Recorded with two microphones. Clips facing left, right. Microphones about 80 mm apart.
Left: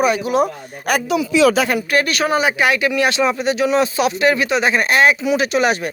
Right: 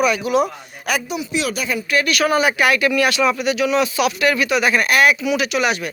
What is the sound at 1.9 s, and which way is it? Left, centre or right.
Speech, left.